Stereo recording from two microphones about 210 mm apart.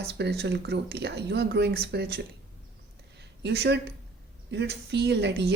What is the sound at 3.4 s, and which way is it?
Speech, 50° right (ahead or behind).